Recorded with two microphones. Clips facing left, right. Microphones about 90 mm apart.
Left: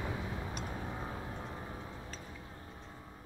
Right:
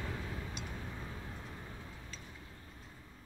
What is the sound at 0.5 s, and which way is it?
Vehicle, 35° left (ahead or behind).